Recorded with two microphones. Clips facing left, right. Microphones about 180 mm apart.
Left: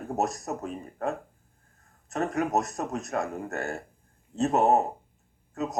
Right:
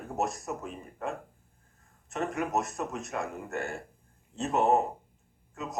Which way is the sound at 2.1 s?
40° left (ahead or behind).